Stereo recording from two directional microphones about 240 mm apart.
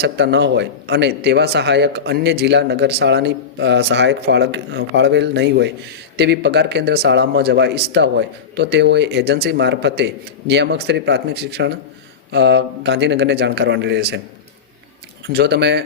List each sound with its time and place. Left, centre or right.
0.0 s speech: right
15.3 s speech: right